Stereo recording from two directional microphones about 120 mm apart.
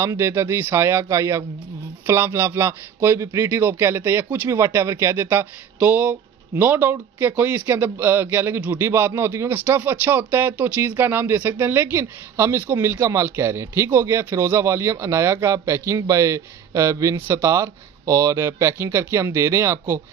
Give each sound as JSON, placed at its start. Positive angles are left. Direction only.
{"t": 0.0, "sound": "a man's voice", "side_deg": -20}